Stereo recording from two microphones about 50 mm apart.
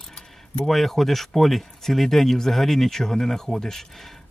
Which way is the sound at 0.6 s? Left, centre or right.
Centre.